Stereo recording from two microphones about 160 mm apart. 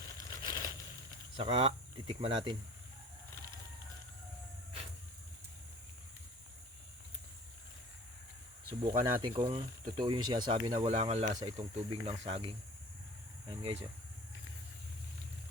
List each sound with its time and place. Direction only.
0.2 s a sound: 20° left (ahead or behind)
1.4 s speech: 35° right (ahead or behind)
8.8 s speech: 35° right (ahead or behind)
10.8 s speech: 40° right (ahead or behind)
11.3 s speech: 25° right (ahead or behind)
11.7 s speech: 40° right (ahead or behind)